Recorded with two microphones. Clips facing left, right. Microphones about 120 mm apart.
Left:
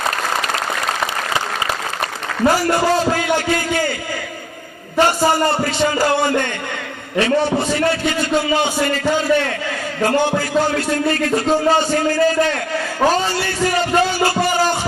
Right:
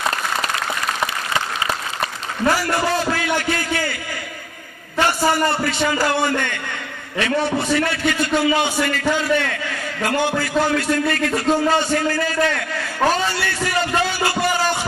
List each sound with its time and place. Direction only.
2.5 s a man's voice: 30° left (ahead or behind)
4.9 s a man's voice: 35° left (ahead or behind)